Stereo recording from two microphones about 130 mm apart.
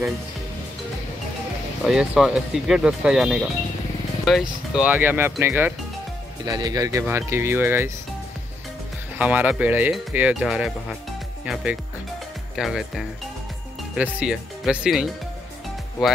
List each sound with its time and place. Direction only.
1.9 s speech: 5° right (ahead or behind)
4.8 s speech: 15° right (ahead or behind)
6.4 s speech: 30° right (ahead or behind)
9.2 s speech: 10° right (ahead or behind)